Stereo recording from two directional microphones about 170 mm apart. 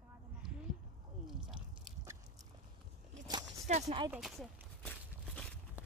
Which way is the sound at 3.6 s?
45° right (ahead or behind).